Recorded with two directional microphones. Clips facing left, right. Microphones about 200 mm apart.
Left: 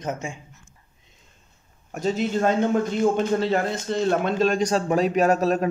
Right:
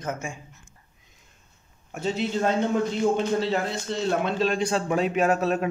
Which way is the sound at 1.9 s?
45° left (ahead or behind).